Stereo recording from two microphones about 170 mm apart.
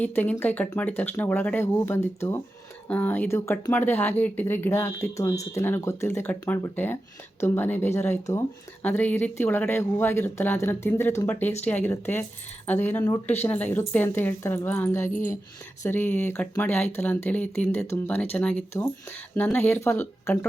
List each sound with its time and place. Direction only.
0.0 s speech: 10° left (ahead or behind)
13.2 s speech: 40° left (ahead or behind)
13.5 s speech: 10° left (ahead or behind)